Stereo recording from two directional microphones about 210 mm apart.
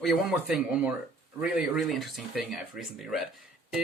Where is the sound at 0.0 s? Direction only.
Centre (ahead or behind).